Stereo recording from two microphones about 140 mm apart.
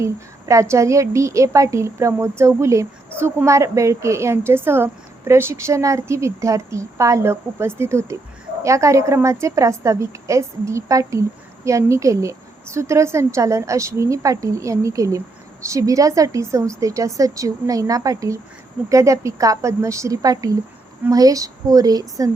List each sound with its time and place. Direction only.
0.0 s a woman's voice: 20° right (ahead or behind)